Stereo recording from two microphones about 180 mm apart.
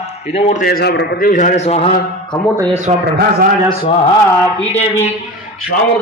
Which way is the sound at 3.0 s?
60° right (ahead or behind).